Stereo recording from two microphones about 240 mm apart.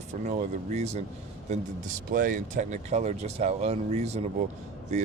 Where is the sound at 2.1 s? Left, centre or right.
Right.